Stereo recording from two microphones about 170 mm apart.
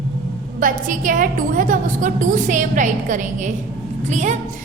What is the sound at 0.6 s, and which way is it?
A woman's voice, 50° right (ahead or behind).